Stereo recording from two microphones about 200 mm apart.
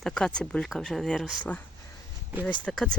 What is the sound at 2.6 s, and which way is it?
Speech, 5° left (ahead or behind).